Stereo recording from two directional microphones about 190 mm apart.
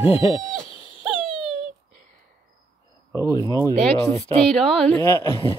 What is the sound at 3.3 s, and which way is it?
A woman's voice, 20° left (ahead or behind).